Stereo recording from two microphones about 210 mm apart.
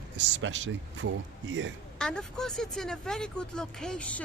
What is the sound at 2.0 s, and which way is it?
Speech, 5° left (ahead or behind).